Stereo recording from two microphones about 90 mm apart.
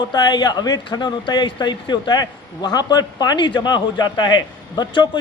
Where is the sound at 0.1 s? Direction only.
50° left (ahead or behind).